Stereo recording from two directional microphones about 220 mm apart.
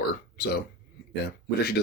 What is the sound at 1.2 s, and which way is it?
Speech, 45° left (ahead or behind).